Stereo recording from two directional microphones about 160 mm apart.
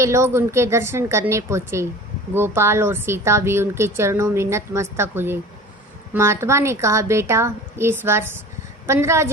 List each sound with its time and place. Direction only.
0.0 s a woman's voice: 15° right (ahead or behind)